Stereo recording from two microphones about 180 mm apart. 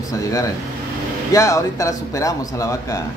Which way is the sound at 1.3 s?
20° left (ahead or behind).